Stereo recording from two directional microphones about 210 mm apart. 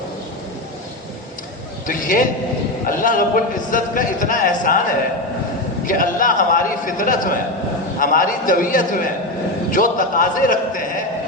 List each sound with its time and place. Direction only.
1.9 s a man's voice: 40° left (ahead or behind)
5.8 s a man's voice: 40° left (ahead or behind)